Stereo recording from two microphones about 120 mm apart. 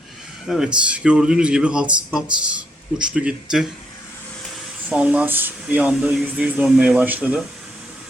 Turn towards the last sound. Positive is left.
turn(degrees=-10)  # may be behind; listen again after turning